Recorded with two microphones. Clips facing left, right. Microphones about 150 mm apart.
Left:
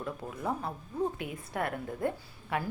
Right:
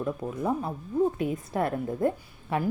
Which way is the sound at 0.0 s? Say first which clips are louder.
Right 7 dB; 20° right (ahead or behind).